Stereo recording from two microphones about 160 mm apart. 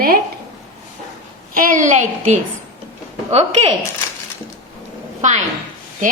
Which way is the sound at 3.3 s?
40° right (ahead or behind).